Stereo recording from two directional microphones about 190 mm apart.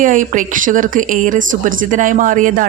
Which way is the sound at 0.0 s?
45° right (ahead or behind).